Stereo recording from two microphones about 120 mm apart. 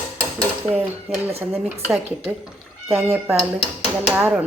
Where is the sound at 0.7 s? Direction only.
15° right (ahead or behind).